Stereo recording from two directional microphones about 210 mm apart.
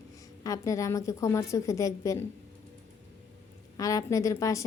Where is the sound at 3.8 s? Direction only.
15° left (ahead or behind).